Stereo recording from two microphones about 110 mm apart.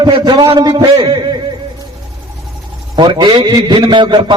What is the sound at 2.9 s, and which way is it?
A man's voice, 45° right (ahead or behind).